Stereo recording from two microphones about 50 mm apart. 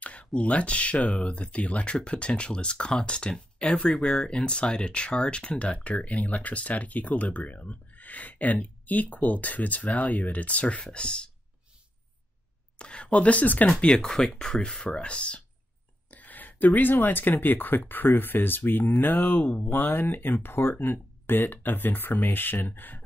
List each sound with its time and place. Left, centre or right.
0.0 s speech: left
12.7 s speech: left
13.7 s speech: centre
16.1 s speech: left